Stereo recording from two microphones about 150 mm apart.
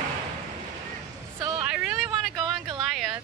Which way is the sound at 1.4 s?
20° right (ahead or behind).